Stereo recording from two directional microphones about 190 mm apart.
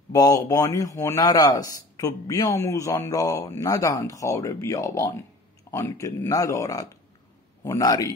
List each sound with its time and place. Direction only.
0.1 s a man's voice: 20° left (ahead or behind)